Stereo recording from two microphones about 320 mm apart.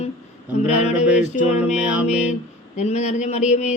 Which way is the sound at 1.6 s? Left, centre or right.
Centre.